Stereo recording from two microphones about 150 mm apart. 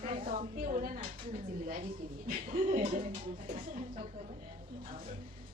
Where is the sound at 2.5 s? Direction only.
40° right (ahead or behind).